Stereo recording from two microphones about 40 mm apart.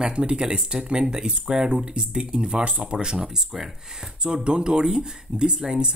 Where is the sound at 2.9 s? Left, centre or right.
Centre.